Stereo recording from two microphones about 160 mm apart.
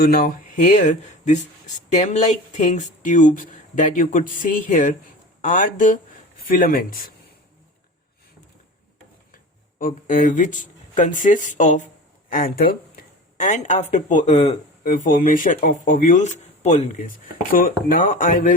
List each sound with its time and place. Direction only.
0.0 s speech: 65° left (ahead or behind)
9.3 s speech: 55° left (ahead or behind)
12.3 s speech: 65° left (ahead or behind)